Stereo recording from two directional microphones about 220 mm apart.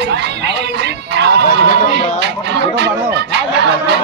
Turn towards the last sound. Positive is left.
turn(degrees=-50)  # may be behind; listen again after turning